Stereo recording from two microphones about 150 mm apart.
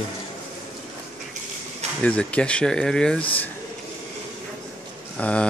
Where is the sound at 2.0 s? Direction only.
10° left (ahead or behind).